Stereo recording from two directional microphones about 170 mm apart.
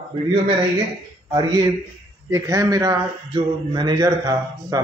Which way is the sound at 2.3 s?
15° right (ahead or behind).